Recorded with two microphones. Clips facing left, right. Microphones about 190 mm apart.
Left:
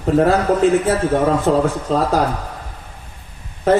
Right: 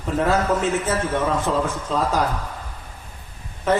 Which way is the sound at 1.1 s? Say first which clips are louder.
Left 6 dB; 40° left (ahead or behind).